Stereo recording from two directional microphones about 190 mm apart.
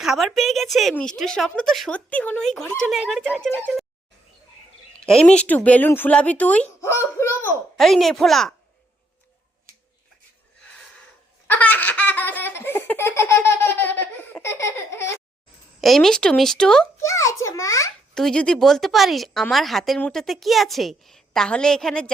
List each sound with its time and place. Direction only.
0.0 s speech: centre (ahead or behind)
4.9 s speech: 5° left (ahead or behind)
7.8 s speech: centre (ahead or behind)
11.4 s laughter: 10° left (ahead or behind)
15.8 s speech: centre (ahead or behind)
17.0 s speech: 15° left (ahead or behind)
18.1 s speech: 5° left (ahead or behind)